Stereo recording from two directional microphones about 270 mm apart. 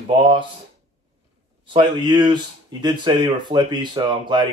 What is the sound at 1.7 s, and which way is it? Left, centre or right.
Speech, centre.